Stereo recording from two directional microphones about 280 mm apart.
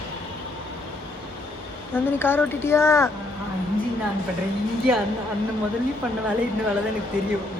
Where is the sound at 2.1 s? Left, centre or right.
Centre.